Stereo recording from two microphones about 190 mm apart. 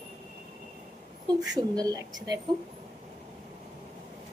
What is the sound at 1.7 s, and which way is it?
Speech, 20° right (ahead or behind).